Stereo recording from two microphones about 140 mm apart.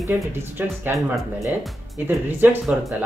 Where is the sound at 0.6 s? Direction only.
15° right (ahead or behind).